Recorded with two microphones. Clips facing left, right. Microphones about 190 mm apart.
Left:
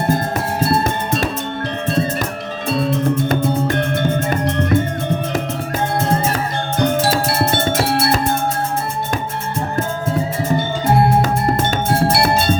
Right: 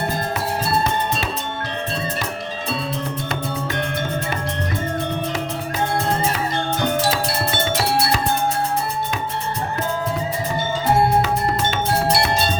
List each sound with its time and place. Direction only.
2.8 s music: 45° left (ahead or behind)
7.1 s music: 45° left (ahead or behind)
12.0 s music: 50° left (ahead or behind)